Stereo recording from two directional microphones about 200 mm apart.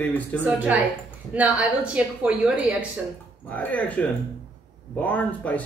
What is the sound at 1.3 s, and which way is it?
A woman's voice, 5° right (ahead or behind).